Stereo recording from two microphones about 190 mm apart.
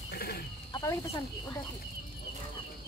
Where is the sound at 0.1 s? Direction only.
55° left (ahead or behind).